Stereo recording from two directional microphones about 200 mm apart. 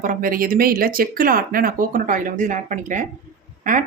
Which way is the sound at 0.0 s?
40° right (ahead or behind).